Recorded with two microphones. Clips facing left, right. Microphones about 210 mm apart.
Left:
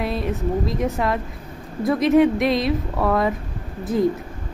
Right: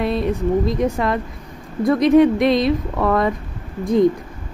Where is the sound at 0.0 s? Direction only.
Centre (ahead or behind).